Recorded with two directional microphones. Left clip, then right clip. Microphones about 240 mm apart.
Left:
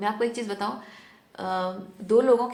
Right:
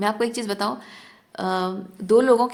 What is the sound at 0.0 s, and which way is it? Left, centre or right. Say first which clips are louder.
A woman's voice: right 3 dB; right.